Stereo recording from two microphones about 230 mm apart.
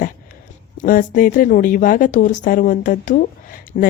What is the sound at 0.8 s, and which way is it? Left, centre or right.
Speech, left.